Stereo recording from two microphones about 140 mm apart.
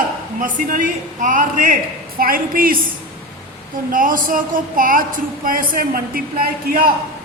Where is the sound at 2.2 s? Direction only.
90° right.